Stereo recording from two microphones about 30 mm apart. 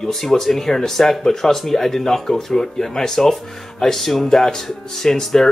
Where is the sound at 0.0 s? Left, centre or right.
Centre.